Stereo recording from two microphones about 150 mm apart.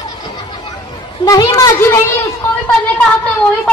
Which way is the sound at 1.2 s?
25° left (ahead or behind).